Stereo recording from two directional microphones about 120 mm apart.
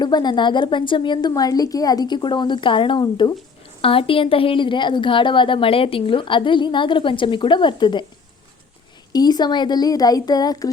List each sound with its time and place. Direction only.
0.0 s a woman's voice: 35° left (ahead or behind)
3.8 s a woman's voice: 50° left (ahead or behind)
9.1 s a woman's voice: 35° left (ahead or behind)